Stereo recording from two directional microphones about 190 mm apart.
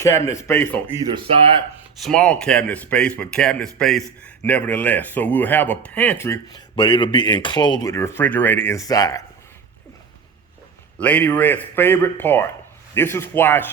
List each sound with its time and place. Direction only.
0.0 s speech: 15° left (ahead or behind)
1.1 s speech: 30° right (ahead or behind)
2.0 s speech: 5° left (ahead or behind)
11.0 s speech: 10° left (ahead or behind)